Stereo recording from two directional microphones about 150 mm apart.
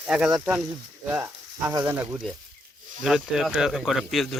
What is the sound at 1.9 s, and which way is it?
Speech, 5° right (ahead or behind).